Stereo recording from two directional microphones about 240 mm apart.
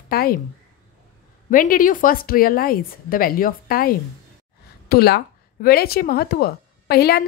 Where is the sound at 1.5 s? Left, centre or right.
Left.